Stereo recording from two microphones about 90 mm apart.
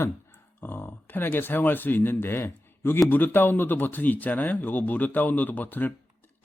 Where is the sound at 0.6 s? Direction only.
25° left (ahead or behind).